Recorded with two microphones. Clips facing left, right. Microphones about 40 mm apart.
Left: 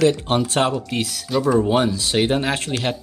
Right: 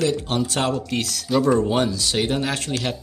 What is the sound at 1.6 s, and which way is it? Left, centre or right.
Speech, centre.